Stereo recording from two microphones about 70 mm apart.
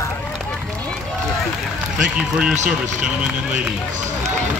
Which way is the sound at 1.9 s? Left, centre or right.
Centre.